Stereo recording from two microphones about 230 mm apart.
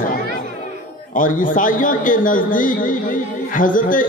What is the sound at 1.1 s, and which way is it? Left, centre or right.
A man's voice, left.